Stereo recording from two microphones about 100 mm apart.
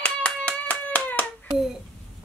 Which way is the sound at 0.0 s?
15° left (ahead or behind).